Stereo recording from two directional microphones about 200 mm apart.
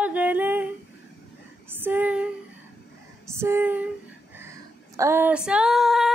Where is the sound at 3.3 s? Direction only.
10° right (ahead or behind).